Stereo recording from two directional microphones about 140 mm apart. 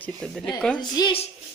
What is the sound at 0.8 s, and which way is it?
Speech, 30° left (ahead or behind).